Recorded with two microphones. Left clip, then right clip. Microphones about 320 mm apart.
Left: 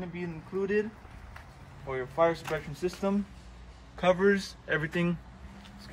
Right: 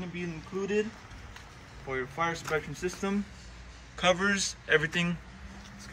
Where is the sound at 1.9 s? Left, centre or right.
Left.